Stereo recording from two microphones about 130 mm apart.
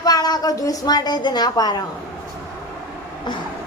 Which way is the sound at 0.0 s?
30° left (ahead or behind).